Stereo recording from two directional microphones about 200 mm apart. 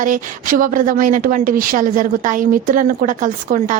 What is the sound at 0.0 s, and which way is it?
Speech, 45° right (ahead or behind).